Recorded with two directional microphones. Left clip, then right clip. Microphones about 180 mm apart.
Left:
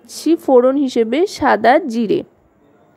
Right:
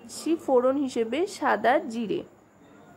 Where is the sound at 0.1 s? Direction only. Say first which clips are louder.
Left 11 dB; 40° left (ahead or behind).